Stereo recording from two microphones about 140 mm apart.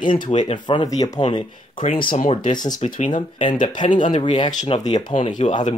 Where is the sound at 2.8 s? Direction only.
60° left (ahead or behind).